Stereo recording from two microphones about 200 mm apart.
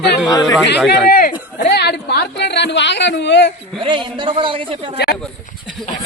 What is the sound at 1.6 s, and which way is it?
Speech, 55° left (ahead or behind).